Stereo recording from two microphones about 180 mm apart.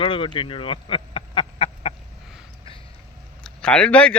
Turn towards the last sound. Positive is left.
turn(degrees=5)  # may be behind; listen again after turning